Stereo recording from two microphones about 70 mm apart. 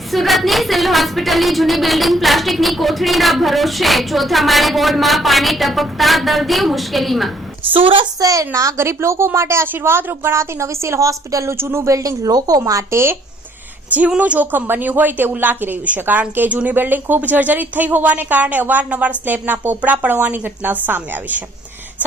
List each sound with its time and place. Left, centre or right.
0.1 s a woman's voice: centre
8.2 s a woman's voice: right
11.5 s a woman's voice: right
12.9 s a woman's voice: right
14.2 s speech: right